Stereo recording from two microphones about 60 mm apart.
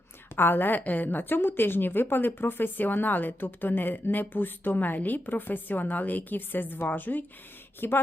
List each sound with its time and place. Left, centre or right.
0.3 s a woman's voice: left